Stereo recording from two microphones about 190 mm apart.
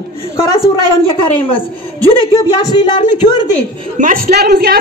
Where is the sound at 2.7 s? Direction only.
20° left (ahead or behind).